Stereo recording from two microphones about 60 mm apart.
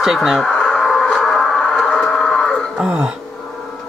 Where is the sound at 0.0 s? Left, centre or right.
Centre.